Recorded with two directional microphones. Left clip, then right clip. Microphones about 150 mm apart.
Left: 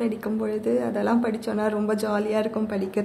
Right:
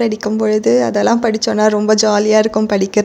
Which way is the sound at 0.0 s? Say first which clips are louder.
Right 11 dB; 35° right (ahead or behind).